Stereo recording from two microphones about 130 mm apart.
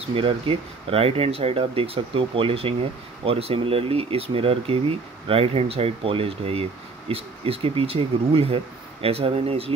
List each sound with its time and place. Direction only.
0.0 s speech: 45° right (ahead or behind)